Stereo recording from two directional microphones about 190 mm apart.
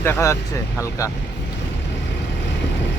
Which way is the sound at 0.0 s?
15° left (ahead or behind).